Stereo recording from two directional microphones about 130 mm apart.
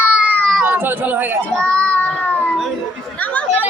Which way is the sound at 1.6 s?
10° left (ahead or behind).